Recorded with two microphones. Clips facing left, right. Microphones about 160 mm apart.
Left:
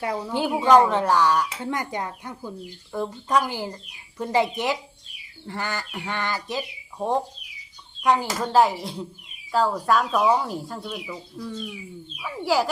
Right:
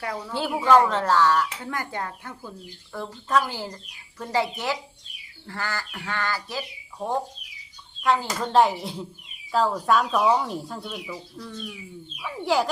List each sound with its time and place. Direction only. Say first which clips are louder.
0.0 s speech: left 4 dB; 20° left (ahead or behind)
8.4 s speech: left 1 dB; centre (ahead or behind)